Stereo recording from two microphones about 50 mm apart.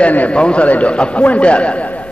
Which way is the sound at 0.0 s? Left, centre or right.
Left.